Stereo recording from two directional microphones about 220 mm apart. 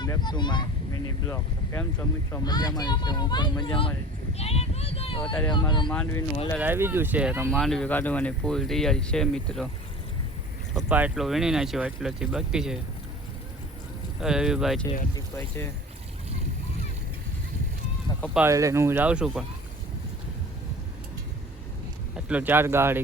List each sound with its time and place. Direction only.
0.0 s speech: 20° left (ahead or behind)
5.9 s speech: 10° left (ahead or behind)
6.6 s speech: 10° right (ahead or behind)
10.8 s speech: 5° right (ahead or behind)
14.2 s speech: 5° right (ahead or behind)
15.1 s speech: 10° left (ahead or behind)
18.3 s speech: 15° right (ahead or behind)
22.1 s speech: 5° right (ahead or behind)